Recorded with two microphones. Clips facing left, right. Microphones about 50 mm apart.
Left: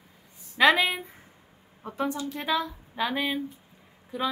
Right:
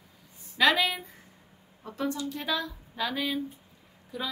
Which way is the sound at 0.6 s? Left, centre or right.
Left.